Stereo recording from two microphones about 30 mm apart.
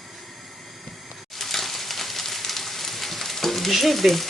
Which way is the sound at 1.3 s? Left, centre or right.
Centre.